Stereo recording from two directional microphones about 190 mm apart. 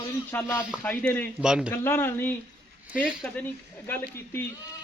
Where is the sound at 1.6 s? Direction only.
10° left (ahead or behind).